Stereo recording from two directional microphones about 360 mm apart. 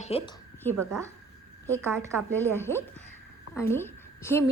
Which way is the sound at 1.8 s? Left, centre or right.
Centre.